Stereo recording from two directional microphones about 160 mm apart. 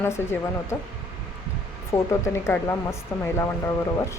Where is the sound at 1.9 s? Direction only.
15° left (ahead or behind).